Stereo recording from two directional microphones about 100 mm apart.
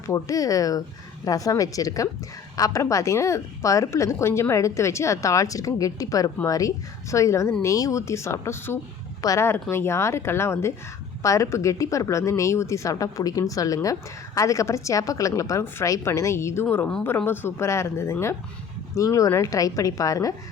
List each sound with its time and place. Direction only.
0.1 s a woman's voice: 35° left (ahead or behind)
16.6 s a woman's voice: 15° left (ahead or behind); by 20.3 s 35° left (ahead or behind)